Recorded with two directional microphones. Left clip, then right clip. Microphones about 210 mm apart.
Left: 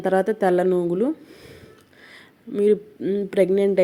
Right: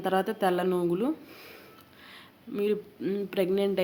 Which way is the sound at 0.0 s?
30° left (ahead or behind).